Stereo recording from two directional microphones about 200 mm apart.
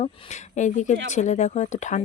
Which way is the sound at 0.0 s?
35° left (ahead or behind).